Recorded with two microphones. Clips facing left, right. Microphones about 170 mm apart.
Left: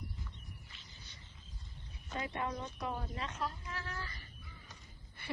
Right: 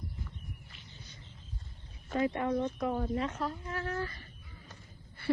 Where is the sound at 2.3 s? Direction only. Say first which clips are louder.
Right 8 dB; 50° right (ahead or behind).